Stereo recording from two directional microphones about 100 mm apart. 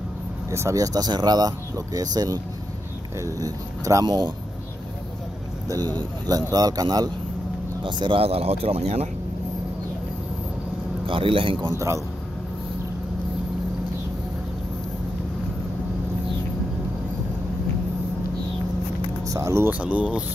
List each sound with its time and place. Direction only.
0.5 s speech: 30° right (ahead or behind)
6.5 s speech: 40° right (ahead or behind)
7.8 s speech: 60° right (ahead or behind); by 9.1 s 90° right
11.1 s a man's voice: 60° right (ahead or behind)
11.7 s speech: 30° right (ahead or behind)
19.2 s speech: 30° right (ahead or behind)
19.7 s speech: 15° right (ahead or behind)